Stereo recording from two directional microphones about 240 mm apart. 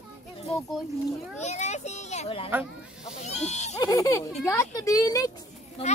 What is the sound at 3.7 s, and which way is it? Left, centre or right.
A child's voice, centre.